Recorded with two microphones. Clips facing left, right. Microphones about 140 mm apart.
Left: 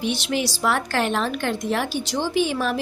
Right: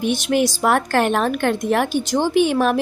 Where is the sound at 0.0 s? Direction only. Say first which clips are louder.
Right 6 dB; 50° right (ahead or behind).